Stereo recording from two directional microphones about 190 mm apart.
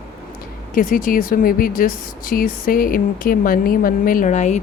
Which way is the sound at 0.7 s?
45° left (ahead or behind).